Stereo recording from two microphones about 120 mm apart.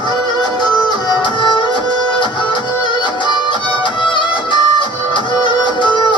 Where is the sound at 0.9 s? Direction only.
40° left (ahead or behind).